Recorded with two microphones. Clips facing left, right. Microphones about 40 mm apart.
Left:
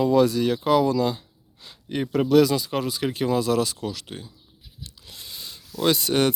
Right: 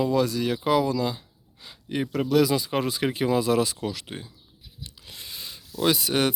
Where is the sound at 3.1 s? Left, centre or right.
Centre.